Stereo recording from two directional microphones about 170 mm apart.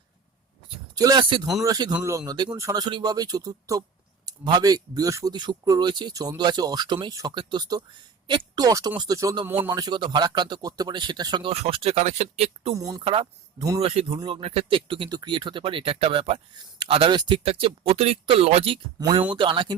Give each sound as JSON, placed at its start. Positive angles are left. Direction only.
{"t": 0.9, "sound": "a man's voice", "side_deg": -25}
{"t": 12.7, "sound": "a man's voice", "side_deg": -20}
{"t": 13.1, "sound": "a man's voice", "side_deg": -30}